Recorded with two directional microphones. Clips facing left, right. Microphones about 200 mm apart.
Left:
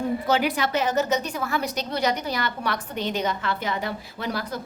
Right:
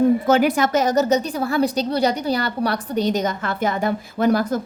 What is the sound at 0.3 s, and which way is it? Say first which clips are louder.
A woman's voice: right 6 dB; 45° right (ahead or behind).